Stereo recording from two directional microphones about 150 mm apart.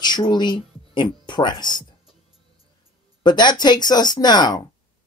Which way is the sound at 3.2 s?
30° left (ahead or behind).